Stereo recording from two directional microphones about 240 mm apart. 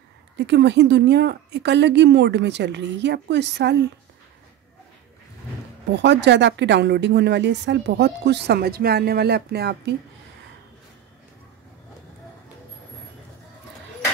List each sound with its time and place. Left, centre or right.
0.4 s speech: right
5.9 s speech: right